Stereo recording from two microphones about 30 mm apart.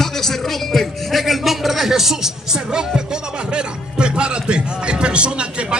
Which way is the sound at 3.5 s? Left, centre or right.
Right.